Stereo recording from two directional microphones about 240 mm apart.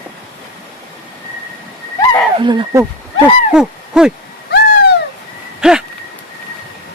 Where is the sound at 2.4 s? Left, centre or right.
Centre.